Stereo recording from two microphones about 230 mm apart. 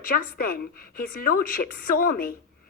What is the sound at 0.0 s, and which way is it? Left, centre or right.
Speech, left.